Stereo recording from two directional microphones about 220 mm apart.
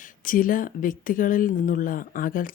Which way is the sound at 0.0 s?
35° left (ahead or behind).